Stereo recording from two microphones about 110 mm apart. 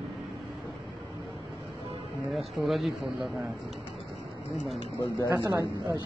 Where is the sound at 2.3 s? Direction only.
Centre (ahead or behind).